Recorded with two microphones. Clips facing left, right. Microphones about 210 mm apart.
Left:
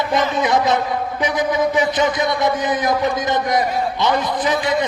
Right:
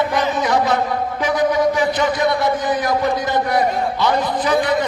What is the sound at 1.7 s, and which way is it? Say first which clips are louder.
A man's voice: even; 20° left (ahead or behind).